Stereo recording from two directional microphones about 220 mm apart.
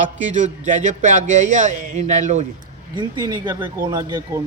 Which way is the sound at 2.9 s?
20° right (ahead or behind).